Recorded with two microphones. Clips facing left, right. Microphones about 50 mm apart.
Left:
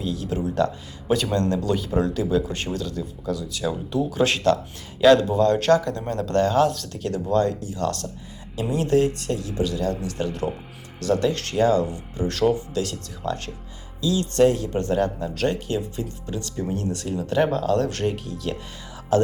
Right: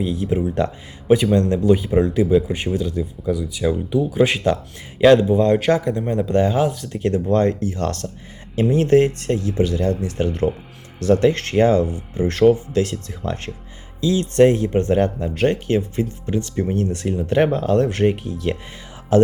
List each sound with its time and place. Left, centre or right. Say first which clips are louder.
0.0 s speech: right 5 dB; right
4.9 s speech: right 3 dB; right
7.0 s speech: right 4 dB; right